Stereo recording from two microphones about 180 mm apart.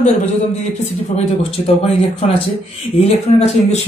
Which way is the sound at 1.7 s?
35° left (ahead or behind).